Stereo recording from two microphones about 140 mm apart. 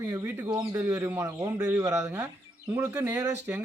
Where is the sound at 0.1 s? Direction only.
20° right (ahead or behind).